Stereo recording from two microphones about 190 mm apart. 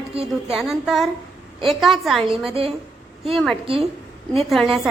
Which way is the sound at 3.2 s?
Centre (ahead or behind).